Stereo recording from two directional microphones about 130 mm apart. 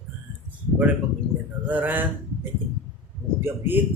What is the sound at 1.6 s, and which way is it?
A man's voice, 15° right (ahead or behind).